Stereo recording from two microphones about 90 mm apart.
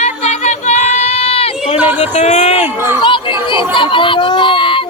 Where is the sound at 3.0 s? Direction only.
60° left (ahead or behind).